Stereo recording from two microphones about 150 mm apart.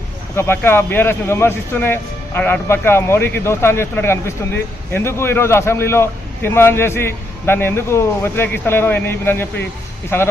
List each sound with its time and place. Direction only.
0.3 s speech: 15° left (ahead or behind)